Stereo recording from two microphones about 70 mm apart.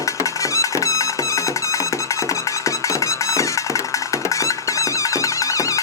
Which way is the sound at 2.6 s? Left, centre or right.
Left.